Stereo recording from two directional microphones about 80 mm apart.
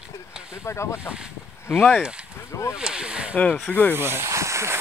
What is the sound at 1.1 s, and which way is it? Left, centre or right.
Speech, centre.